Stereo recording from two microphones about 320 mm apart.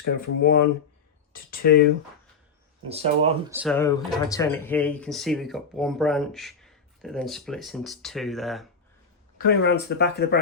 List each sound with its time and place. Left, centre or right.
0.0 s speech: left
2.9 s speech: centre
3.5 s speech: centre
3.8 s speech: centre
9.4 s speech: left